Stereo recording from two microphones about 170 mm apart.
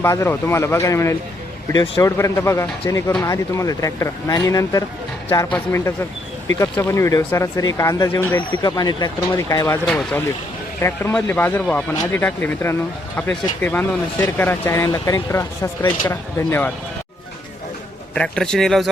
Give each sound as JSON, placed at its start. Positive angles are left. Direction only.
{"t": 0.0, "sound": "speech", "side_deg": 15}
{"t": 6.6, "sound": "speech", "side_deg": 15}
{"t": 9.6, "sound": "speech", "side_deg": 10}
{"t": 18.1, "sound": "a man's voice", "side_deg": 5}